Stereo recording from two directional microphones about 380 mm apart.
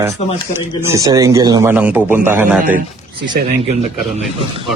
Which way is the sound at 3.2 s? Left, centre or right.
Centre.